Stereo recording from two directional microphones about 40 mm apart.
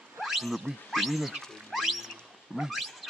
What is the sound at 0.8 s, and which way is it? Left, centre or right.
Speech, centre.